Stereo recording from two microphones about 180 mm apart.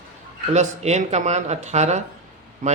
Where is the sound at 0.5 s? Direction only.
40° right (ahead or behind).